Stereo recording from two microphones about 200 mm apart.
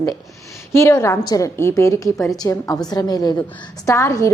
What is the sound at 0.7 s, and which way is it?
A woman's voice, 15° left (ahead or behind).